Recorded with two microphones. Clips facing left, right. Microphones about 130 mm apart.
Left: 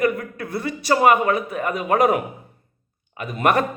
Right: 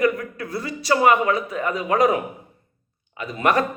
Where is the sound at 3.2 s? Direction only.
50° left (ahead or behind).